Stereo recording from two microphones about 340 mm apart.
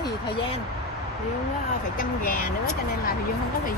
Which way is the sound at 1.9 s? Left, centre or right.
Left.